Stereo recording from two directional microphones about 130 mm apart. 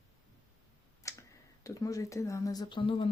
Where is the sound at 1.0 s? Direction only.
25° left (ahead or behind); by 3.0 s 40° left (ahead or behind).